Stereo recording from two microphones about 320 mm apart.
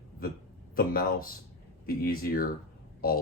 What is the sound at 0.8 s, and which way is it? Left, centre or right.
Speech, left.